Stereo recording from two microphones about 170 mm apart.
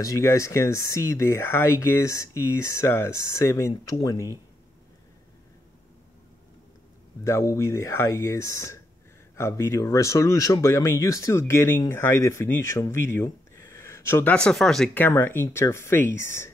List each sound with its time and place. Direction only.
0.0 s speech: 15° left (ahead or behind)
7.2 s speech: 15° left (ahead or behind)